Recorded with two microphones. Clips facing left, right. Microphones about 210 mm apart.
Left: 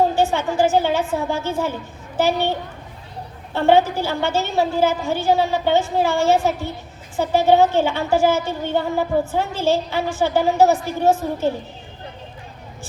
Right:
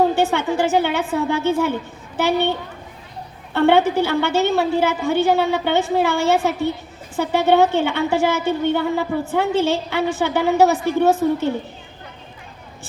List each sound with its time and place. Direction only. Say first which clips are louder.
0.2 s a woman's voice: even; 60° right (ahead or behind)
3.5 s a woman's voice: right 1 dB; 60° right (ahead or behind)